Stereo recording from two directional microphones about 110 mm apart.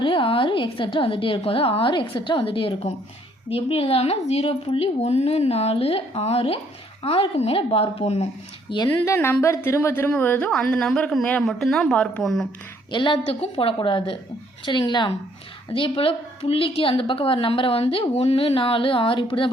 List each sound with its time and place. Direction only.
0.0 s a woman's voice: 50° left (ahead or behind); by 8.3 s 75° left (ahead or behind)
8.7 s a woman's voice: 50° left (ahead or behind)
9.0 s a woman's voice: 25° left (ahead or behind); by 12.5 s centre (ahead or behind)
12.9 s a woman's voice: 45° left (ahead or behind)
13.4 s a woman's voice: 60° left (ahead or behind); by 15.1 s 40° left (ahead or behind)
15.7 s a woman's voice: 55° left (ahead or behind)